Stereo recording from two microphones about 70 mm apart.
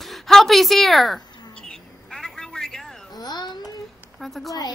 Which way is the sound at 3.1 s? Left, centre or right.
Left.